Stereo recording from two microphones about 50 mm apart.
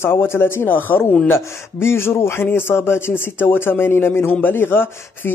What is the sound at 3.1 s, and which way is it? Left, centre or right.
A man's voice, left.